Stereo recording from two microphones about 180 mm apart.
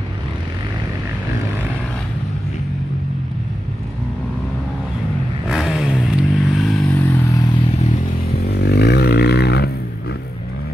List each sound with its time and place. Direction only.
5.5 s vehicle: centre (ahead or behind)
6.9 s vehicle: 15° left (ahead or behind)
8.5 s a sound: 65° left (ahead or behind)